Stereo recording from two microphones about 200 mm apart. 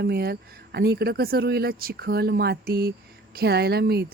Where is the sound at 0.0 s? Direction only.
55° right (ahead or behind).